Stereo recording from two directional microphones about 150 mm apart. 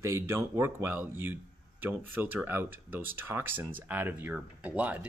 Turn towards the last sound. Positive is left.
turn(degrees=-10)  # may be behind; listen again after turning